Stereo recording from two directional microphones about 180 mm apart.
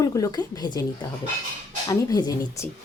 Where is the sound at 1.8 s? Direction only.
20° left (ahead or behind).